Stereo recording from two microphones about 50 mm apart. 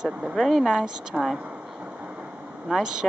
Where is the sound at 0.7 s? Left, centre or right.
Centre.